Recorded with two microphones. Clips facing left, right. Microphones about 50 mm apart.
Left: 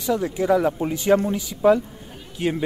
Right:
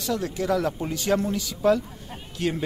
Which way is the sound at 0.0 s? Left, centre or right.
Centre.